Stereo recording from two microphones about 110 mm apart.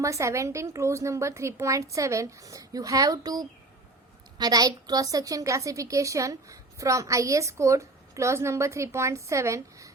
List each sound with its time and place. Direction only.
0.0 s a woman's voice: 25° right (ahead or behind)